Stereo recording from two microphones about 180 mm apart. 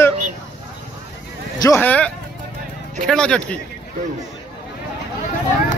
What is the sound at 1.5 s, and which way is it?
Speech, 20° left (ahead or behind).